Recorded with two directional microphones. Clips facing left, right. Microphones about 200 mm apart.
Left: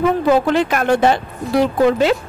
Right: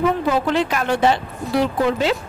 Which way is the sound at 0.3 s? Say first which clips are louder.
Left 5 dB; 50° left (ahead or behind).